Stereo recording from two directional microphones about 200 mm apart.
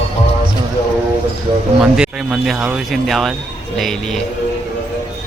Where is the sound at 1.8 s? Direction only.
5° right (ahead or behind).